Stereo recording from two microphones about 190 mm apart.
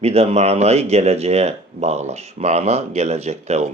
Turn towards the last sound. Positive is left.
turn(degrees=-35)  # may be behind; listen again after turning